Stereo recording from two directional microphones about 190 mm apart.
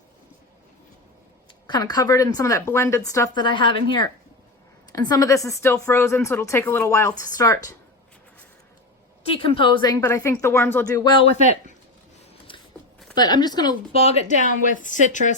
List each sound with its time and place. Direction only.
1.6 s a woman's voice: 20° left (ahead or behind)
9.5 s a woman's voice: 25° left (ahead or behind)
12.5 s a sound: 25° left (ahead or behind)
13.1 s a woman's voice: 20° left (ahead or behind)
14.0 s a woman's voice: 35° left (ahead or behind)